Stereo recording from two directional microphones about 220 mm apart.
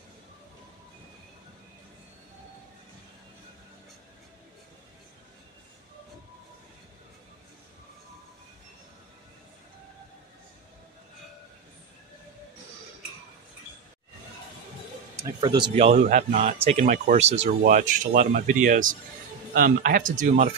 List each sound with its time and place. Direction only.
15.4 s speech: 20° right (ahead or behind)